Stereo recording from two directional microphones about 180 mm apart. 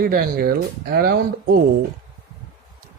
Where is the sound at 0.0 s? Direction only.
55° right (ahead or behind).